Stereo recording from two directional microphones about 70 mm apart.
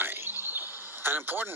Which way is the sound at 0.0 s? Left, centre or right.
Right.